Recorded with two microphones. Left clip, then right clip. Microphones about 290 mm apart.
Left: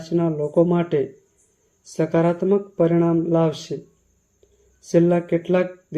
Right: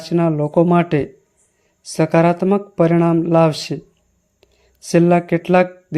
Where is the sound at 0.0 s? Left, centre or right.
Right.